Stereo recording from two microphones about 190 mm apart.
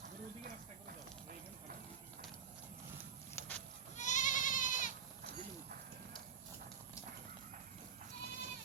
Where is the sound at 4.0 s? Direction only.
40° left (ahead or behind).